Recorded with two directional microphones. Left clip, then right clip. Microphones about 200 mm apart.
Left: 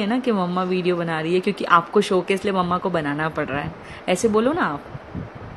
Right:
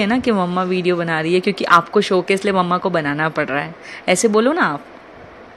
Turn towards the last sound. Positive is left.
turn(degrees=-20)  # may be behind; listen again after turning